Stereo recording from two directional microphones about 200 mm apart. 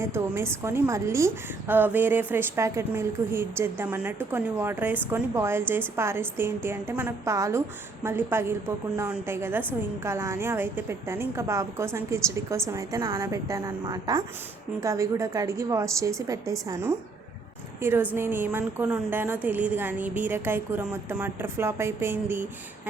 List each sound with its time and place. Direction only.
0.0 s a woman's voice: 15° right (ahead or behind)